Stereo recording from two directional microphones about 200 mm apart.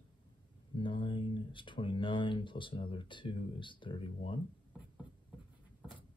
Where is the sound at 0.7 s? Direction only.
25° left (ahead or behind).